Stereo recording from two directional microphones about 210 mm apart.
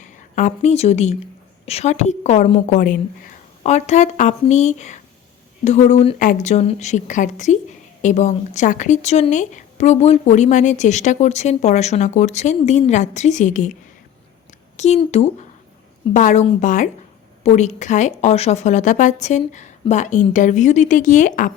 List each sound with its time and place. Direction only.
0.0 s a woman's voice: 35° left (ahead or behind)
14.8 s a woman's voice: 30° left (ahead or behind)